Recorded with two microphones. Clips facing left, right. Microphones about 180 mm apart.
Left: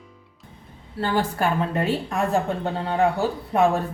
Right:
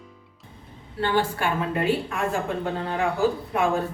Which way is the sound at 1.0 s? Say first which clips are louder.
Left 1 dB; 40° left (ahead or behind).